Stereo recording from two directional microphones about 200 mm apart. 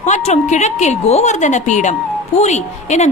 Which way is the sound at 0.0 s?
35° left (ahead or behind).